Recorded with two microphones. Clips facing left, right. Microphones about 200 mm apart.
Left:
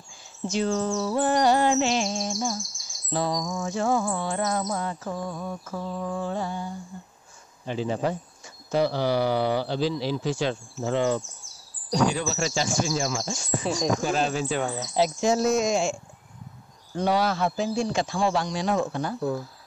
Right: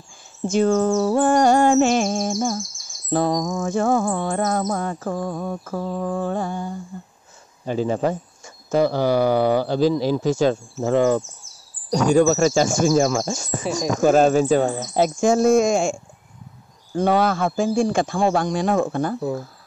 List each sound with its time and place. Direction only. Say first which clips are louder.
0.5 s bird: right 8 dB; 50° right (ahead or behind)
2.3 s bird: right 6 dB; centre (ahead or behind)
3.1 s bird: right 7 dB; 50° right (ahead or behind)